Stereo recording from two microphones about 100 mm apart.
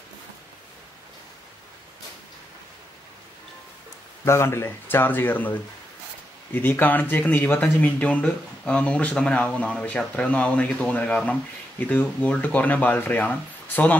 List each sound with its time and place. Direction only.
4.2 s speech: 25° left (ahead or behind)